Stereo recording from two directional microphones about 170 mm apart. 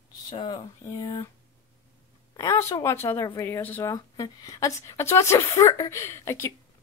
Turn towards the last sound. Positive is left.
turn(degrees=15)  # may be behind; listen again after turning